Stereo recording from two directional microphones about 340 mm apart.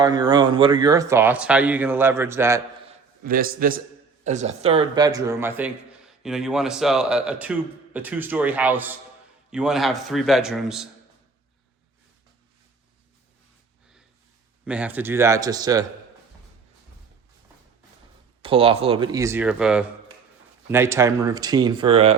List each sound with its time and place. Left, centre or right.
0.0 s speech: centre
3.2 s a man's voice: right; by 10.8 s centre
14.6 s speech: centre
18.4 s speech: centre